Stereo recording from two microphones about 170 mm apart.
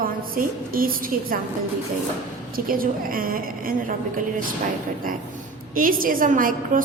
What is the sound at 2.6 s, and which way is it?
A woman's voice, 55° right (ahead or behind).